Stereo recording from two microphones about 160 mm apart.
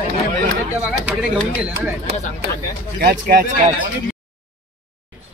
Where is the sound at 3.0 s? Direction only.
70° right (ahead or behind).